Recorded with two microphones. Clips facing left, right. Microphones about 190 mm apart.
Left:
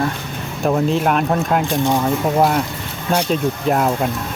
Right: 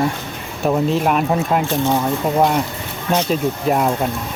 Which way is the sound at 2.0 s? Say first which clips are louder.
Left 1 dB; centre (ahead or behind).